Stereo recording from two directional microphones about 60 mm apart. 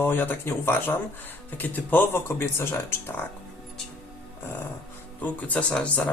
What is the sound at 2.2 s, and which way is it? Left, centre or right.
Speech, left.